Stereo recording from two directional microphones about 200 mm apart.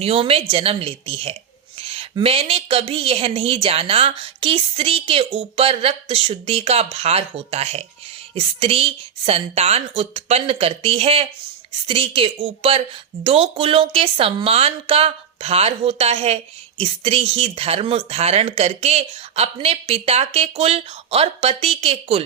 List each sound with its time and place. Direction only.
0.0 s speech: 30° right (ahead or behind)